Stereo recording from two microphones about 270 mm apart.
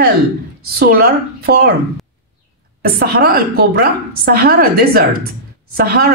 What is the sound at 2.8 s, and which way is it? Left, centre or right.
A woman's voice, right.